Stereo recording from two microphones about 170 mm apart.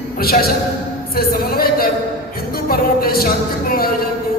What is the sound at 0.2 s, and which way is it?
Speech, 60° left (ahead or behind).